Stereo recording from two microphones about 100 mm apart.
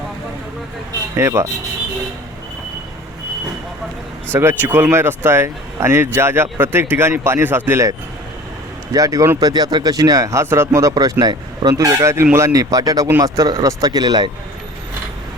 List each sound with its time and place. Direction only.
1.1 s speech: 25° right (ahead or behind)
4.3 s speech: 25° right (ahead or behind)
8.9 s speech: 35° right (ahead or behind)
12.1 s speech: 25° right (ahead or behind)
12.5 s speech: 35° right (ahead or behind)